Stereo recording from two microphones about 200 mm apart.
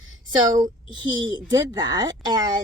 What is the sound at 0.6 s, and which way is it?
Speech, 20° right (ahead or behind).